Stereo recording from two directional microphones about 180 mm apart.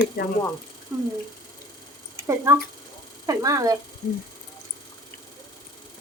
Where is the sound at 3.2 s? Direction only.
20° right (ahead or behind).